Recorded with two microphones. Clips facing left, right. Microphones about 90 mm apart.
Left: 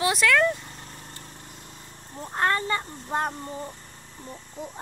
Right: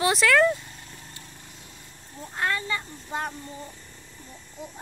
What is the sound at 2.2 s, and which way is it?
Speech, 40° left (ahead or behind).